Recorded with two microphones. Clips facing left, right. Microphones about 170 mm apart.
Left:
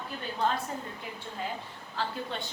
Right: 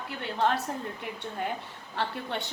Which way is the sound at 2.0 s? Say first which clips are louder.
Right 2 dB; 65° right (ahead or behind).